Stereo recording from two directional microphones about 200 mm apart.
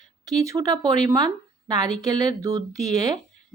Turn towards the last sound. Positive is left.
turn(degrees=-20)  # may be behind; listen again after turning